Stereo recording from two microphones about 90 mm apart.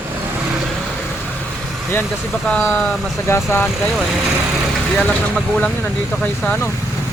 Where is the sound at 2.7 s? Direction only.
15° left (ahead or behind).